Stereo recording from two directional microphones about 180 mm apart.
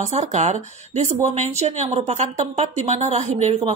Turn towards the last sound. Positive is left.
turn(degrees=-40)  # may be behind; listen again after turning